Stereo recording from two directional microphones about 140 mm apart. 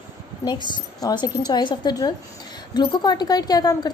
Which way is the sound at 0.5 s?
35° left (ahead or behind).